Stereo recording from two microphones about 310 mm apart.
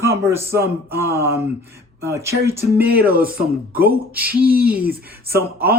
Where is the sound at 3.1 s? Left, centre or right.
Right.